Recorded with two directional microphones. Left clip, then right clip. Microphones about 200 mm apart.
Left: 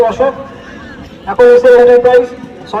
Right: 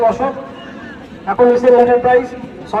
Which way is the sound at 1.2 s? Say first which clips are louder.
Left 6 dB; 20° right (ahead or behind).